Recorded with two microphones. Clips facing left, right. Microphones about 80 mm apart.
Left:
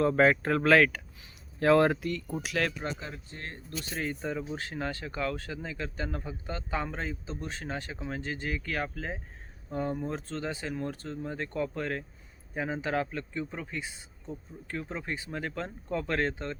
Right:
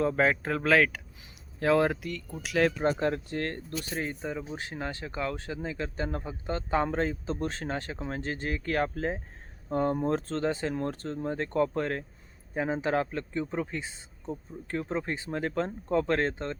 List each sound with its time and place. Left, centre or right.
0.0 s speech: centre
2.8 s speech: right
3.8 s speech: right
4.2 s speech: centre
4.4 s speech: right